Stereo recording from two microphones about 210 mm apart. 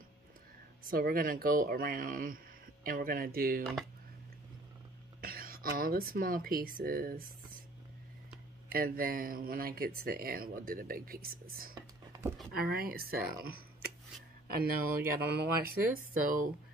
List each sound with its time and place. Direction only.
0.8 s speech: 45° right (ahead or behind)
5.2 s speech: 45° right (ahead or behind)
8.6 s speech: 45° right (ahead or behind)
11.7 s a sound: 15° right (ahead or behind)
12.5 s speech: 45° right (ahead or behind)
14.5 s speech: 45° right (ahead or behind)